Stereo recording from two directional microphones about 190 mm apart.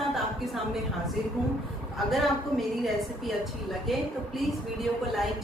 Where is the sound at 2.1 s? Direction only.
Centre (ahead or behind).